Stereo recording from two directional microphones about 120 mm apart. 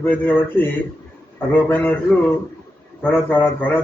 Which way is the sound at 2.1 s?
5° left (ahead or behind).